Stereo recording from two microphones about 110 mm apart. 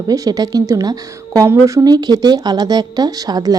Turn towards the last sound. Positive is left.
turn(degrees=-35)  # may be behind; listen again after turning